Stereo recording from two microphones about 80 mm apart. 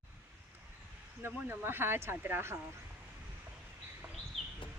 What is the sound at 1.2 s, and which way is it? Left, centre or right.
Speech, right.